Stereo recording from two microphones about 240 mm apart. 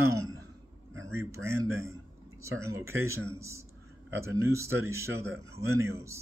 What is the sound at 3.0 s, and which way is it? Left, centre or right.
Speech, centre.